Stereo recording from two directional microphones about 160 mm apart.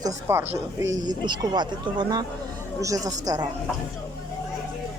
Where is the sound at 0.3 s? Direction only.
15° right (ahead or behind).